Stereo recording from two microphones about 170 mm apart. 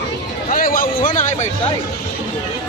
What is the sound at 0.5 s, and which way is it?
Speech, 55° left (ahead or behind).